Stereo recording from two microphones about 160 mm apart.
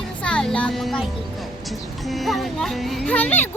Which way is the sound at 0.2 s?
5° left (ahead or behind).